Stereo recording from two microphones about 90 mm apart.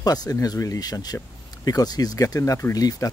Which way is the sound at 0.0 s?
45° left (ahead or behind).